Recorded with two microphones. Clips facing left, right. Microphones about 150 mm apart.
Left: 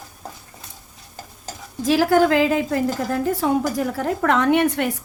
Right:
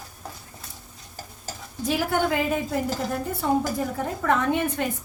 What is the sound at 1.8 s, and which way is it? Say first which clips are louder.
A woman's voice: left 8 dB; 90° left.